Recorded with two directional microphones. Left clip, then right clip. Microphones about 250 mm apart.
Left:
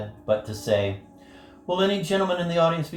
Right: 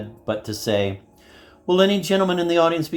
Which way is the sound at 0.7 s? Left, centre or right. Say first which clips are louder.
Right 1 dB; right.